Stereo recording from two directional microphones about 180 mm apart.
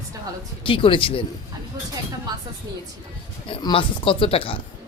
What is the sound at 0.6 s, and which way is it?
Speech, 30° left (ahead or behind).